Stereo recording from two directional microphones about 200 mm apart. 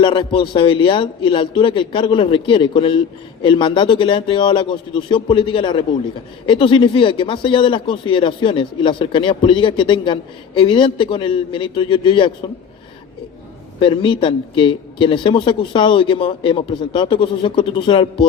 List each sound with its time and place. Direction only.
0.0 s speech: 25° left (ahead or behind)
13.7 s speech: 25° left (ahead or behind)